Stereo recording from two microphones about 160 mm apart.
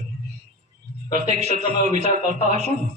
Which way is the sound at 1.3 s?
45° right (ahead or behind).